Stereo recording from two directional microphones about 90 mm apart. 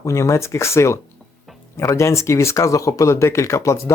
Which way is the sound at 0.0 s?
35° left (ahead or behind).